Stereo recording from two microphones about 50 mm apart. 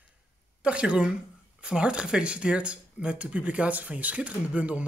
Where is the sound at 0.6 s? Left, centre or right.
Right.